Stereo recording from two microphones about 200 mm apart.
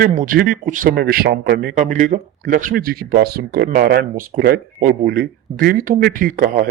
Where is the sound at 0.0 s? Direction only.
40° right (ahead or behind).